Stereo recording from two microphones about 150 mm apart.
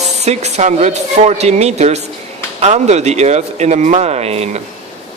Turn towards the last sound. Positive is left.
turn(degrees=-45)  # may be behind; listen again after turning